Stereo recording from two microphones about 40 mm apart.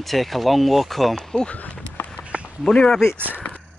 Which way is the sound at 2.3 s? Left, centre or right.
Right.